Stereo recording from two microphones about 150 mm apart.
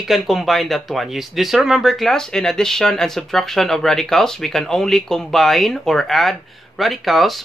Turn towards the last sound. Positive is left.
turn(degrees=0)  # may be behind; listen again after turning